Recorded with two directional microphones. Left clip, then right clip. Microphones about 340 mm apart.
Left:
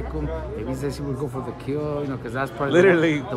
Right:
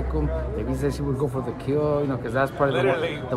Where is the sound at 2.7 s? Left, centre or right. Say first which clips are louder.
Left 6 dB; left.